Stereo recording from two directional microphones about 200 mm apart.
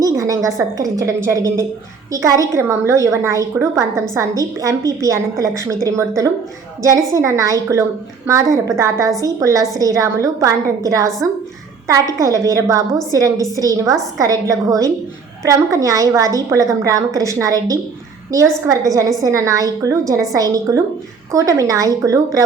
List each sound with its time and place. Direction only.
0.0 s a woman's voice: 15° right (ahead or behind)